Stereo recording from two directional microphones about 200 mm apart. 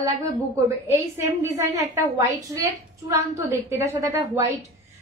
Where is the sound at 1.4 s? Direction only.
15° right (ahead or behind).